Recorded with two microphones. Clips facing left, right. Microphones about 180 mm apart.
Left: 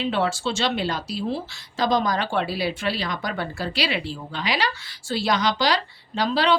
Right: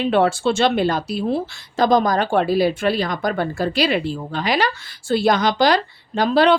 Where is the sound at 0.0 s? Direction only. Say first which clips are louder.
Right 7 dB; 55° right (ahead or behind).